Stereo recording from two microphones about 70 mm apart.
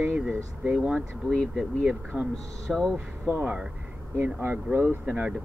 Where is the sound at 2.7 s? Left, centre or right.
Centre.